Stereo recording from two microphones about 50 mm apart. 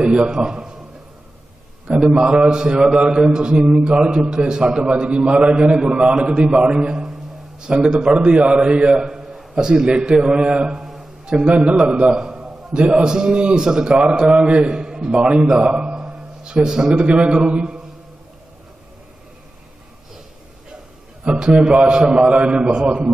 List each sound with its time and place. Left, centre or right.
0.0 s a man's voice: centre
1.9 s a man's voice: centre
7.1 s a sound: centre
7.6 s a man's voice: centre
9.0 s a sound: centre
9.6 s a man's voice: centre
10.8 s a sound: centre
11.2 s a man's voice: right; by 12.7 s centre
12.7 s a man's voice: right
15.9 s a man's voice: centre
21.4 s a man's voice: centre